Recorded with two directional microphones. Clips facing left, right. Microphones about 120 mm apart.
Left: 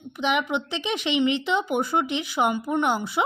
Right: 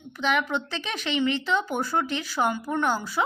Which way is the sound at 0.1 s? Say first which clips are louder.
Left 1 dB; 15° left (ahead or behind).